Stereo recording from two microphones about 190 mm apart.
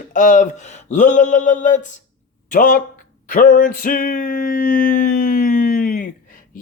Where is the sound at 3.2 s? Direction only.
45° left (ahead or behind).